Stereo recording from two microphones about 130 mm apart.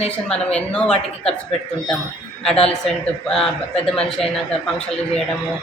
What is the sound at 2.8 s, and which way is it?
Speech, 5° left (ahead or behind).